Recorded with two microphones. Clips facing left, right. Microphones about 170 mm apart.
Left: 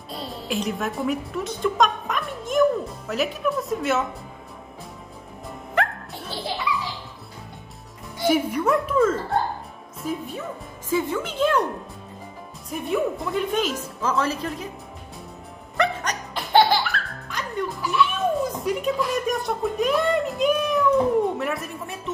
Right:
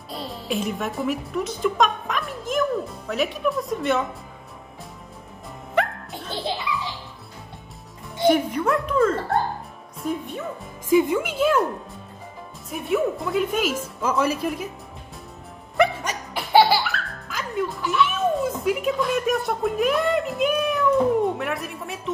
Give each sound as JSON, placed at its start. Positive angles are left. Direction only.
{"t": 0.1, "sound": "music", "side_deg": 0}
{"t": 3.1, "sound": "speech", "side_deg": 0}
{"t": 5.8, "sound": "music", "side_deg": 0}
{"t": 6.3, "sound": "children playing", "side_deg": -20}
{"t": 8.3, "sound": "speech", "side_deg": 5}
{"t": 10.9, "sound": "speech", "side_deg": -15}
{"t": 12.6, "sound": "speech", "side_deg": 0}
{"t": 15.8, "sound": "music", "side_deg": -10}
{"t": 21.4, "sound": "speech", "side_deg": 0}